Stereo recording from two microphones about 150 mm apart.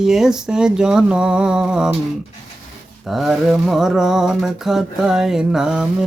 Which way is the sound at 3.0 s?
Centre (ahead or behind).